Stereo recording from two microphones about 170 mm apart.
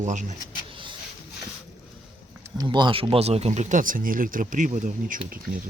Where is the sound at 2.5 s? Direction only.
25° right (ahead or behind); by 5.6 s 55° right (ahead or behind).